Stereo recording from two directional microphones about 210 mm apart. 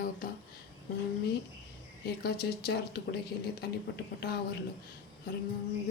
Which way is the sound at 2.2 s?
50° left (ahead or behind).